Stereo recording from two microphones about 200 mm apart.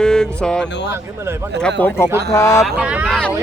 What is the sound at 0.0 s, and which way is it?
Speech, 5° left (ahead or behind).